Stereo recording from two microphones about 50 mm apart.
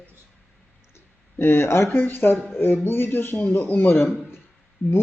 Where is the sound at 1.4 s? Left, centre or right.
Left.